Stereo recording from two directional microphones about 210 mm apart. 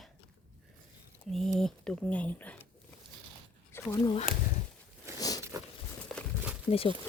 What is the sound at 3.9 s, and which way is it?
Speech, 15° left (ahead or behind).